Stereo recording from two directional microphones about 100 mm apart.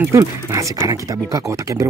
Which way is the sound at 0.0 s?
30° right (ahead or behind).